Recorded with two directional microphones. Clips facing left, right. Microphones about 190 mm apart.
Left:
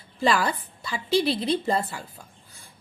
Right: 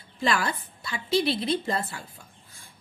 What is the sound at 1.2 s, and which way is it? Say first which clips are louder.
Speech: left 2 dB; 35° left (ahead or behind).